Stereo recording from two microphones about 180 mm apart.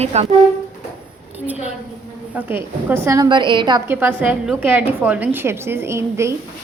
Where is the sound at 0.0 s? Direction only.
35° right (ahead or behind).